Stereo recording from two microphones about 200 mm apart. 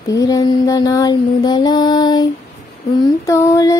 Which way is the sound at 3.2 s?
15° left (ahead or behind).